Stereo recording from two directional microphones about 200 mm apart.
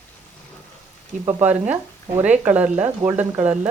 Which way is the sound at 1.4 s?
10° right (ahead or behind).